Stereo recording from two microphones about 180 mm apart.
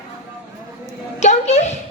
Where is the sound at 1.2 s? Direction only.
40° left (ahead or behind).